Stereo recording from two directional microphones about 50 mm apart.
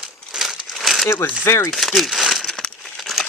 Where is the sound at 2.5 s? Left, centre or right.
Centre.